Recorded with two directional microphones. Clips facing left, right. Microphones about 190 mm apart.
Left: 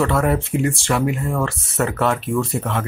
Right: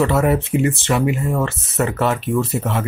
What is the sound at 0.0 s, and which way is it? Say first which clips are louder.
Speech: right 2 dB; 5° right (ahead or behind).